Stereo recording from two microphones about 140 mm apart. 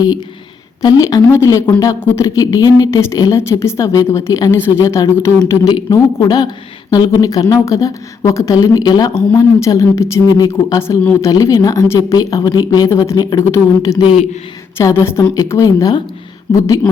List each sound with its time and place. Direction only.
0.8 s speech: 25° left (ahead or behind)
14.0 s speech: 40° left (ahead or behind)
14.8 s speech: 20° left (ahead or behind)